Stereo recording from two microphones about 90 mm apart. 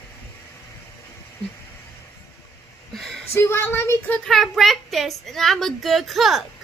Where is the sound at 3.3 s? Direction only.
25° left (ahead or behind).